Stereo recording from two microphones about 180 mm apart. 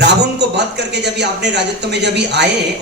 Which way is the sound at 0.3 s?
70° right (ahead or behind).